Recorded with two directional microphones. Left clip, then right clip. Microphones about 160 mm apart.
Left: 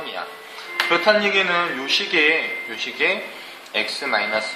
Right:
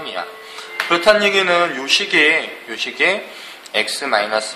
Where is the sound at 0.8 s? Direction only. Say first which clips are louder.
Right 4 dB; 40° right (ahead or behind).